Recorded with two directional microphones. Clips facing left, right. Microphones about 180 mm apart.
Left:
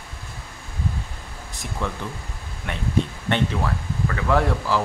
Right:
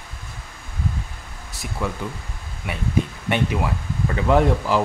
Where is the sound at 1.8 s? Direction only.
10° right (ahead or behind).